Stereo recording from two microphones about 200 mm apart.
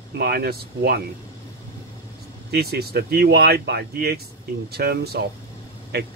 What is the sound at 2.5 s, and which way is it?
Speech, 50° right (ahead or behind).